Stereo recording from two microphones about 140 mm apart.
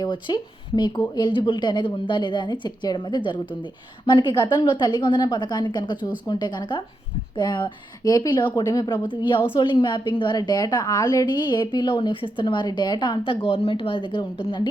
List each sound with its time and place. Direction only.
0.0 s a woman's voice: 35° left (ahead or behind)